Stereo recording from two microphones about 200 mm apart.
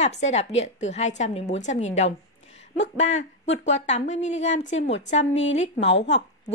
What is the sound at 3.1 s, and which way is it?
A woman's voice, 35° left (ahead or behind).